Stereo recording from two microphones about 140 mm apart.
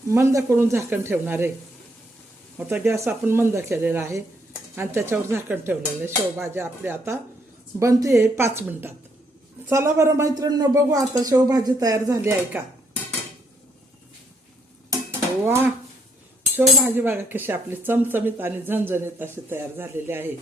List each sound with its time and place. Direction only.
0.1 s speech: 20° right (ahead or behind)
2.6 s speech: 10° right (ahead or behind)
16.6 s speech: 15° right (ahead or behind)